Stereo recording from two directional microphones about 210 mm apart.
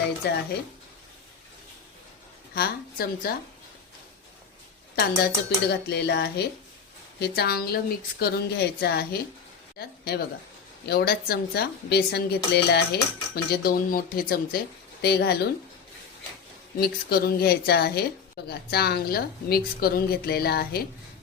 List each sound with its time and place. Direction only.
0.2 s speech: 50° left (ahead or behind)
2.6 s speech: 45° left (ahead or behind)
4.9 s speech: 50° left (ahead or behind)
16.8 s speech: 50° left (ahead or behind)